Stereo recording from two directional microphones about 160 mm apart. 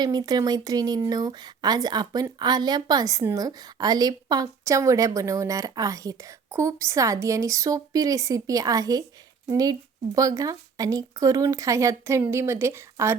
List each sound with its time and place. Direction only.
0.0 s speech: 25° right (ahead or behind)